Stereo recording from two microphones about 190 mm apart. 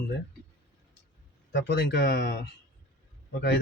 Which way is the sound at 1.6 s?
65° left (ahead or behind).